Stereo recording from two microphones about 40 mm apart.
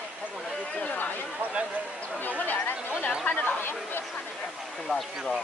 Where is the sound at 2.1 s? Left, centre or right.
Left.